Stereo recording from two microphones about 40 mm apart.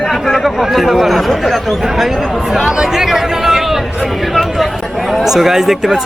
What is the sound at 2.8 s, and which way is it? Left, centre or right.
Chatter, centre.